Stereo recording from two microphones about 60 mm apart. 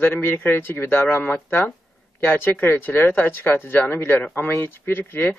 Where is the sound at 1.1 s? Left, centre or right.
Left.